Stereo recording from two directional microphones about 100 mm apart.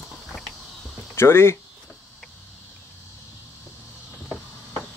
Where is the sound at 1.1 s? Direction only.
25° left (ahead or behind).